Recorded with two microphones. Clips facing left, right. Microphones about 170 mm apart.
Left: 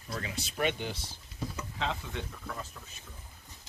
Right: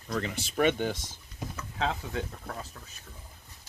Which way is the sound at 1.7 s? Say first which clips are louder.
Right 6 dB; 40° right (ahead or behind).